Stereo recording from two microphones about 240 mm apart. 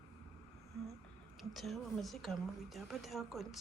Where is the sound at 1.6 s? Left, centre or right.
Centre.